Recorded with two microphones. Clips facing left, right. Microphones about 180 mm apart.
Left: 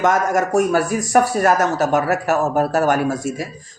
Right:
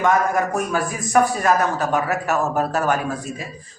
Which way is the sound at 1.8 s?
40° left (ahead or behind).